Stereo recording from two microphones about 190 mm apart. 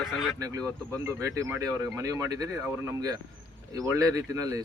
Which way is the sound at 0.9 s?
15° right (ahead or behind).